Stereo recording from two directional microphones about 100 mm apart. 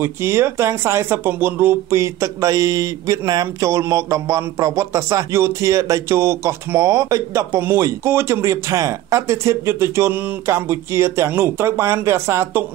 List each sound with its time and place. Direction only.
0.0 s speech: 25° right (ahead or behind)